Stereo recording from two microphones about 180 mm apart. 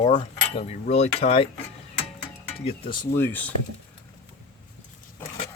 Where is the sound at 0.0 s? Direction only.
30° left (ahead or behind).